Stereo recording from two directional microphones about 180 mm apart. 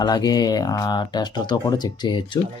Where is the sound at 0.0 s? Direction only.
20° left (ahead or behind).